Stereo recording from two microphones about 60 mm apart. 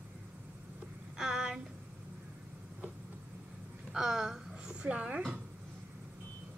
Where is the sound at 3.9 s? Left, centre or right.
Centre.